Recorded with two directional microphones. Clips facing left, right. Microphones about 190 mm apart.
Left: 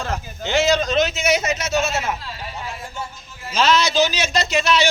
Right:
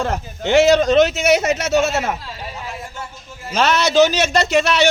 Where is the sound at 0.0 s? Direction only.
60° right (ahead or behind).